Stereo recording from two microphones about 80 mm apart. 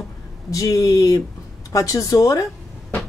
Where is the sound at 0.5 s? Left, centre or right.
Left.